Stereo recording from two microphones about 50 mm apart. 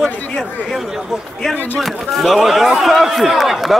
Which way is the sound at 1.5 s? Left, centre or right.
Left.